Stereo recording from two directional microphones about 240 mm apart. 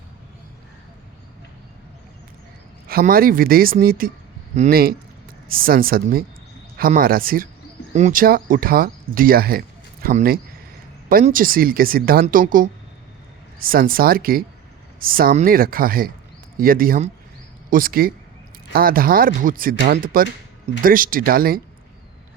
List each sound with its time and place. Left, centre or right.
2.8 s speech: right